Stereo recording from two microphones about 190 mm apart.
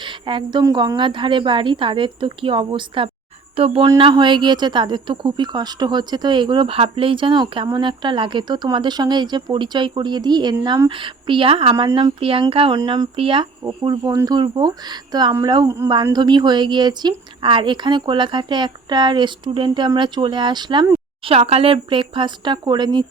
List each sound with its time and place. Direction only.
0.0 s a woman's voice: 25° right (ahead or behind)